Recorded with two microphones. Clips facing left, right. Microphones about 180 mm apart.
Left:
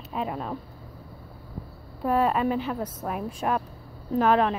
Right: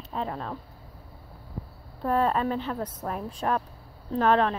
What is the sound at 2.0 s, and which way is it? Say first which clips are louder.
A woman's voice: left 2 dB; 10° left (ahead or behind).